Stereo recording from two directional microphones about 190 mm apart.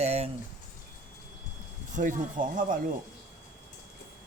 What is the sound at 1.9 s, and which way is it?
Speech, 40° right (ahead or behind).